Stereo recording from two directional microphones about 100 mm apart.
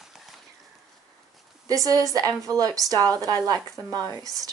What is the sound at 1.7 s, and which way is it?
Speech, 35° right (ahead or behind).